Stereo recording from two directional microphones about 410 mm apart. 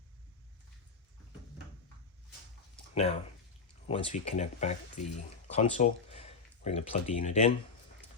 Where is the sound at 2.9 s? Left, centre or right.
Centre.